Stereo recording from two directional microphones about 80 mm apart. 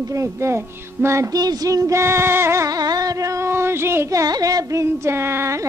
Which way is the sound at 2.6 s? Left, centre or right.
Right.